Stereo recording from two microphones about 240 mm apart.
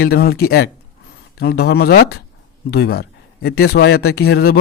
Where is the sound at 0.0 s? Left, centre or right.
Left.